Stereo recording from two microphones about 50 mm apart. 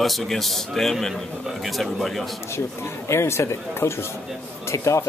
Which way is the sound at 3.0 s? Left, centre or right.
Left.